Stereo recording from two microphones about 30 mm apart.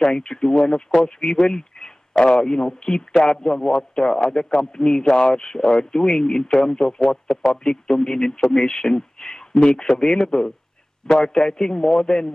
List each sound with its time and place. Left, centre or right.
0.0 s speech: left
1.5 s a sound: left
2.4 s speech: left